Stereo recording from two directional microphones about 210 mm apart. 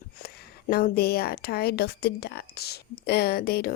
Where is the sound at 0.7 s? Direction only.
45° left (ahead or behind).